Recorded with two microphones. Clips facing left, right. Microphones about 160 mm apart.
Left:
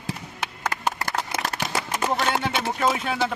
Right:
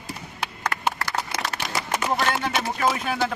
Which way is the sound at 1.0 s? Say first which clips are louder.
Left 1 dB; 50° left (ahead or behind).